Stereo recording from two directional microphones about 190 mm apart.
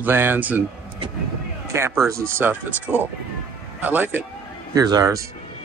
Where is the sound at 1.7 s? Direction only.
15° right (ahead or behind).